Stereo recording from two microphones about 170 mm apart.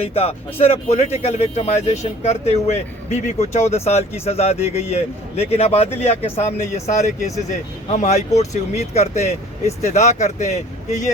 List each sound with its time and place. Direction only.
0.1 s speech: 35° left (ahead or behind)